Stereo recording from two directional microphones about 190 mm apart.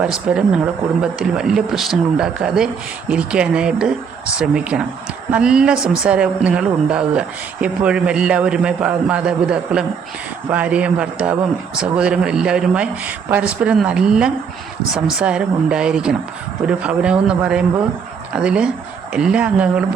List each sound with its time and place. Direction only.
0.0 s a woman's voice: 5° right (ahead or behind)